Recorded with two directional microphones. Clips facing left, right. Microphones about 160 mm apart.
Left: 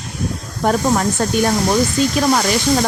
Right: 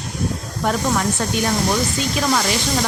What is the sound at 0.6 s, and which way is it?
Speech, 40° left (ahead or behind).